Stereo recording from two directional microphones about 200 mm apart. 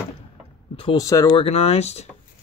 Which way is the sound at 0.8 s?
20° left (ahead or behind).